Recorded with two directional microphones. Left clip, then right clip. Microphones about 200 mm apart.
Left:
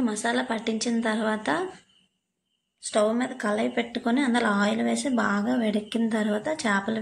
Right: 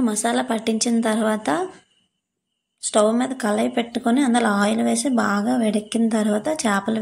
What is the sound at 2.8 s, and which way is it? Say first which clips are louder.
A woman's voice: right 5 dB; 35° right (ahead or behind).